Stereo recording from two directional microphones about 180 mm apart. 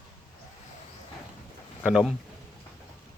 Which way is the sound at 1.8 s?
5° right (ahead or behind).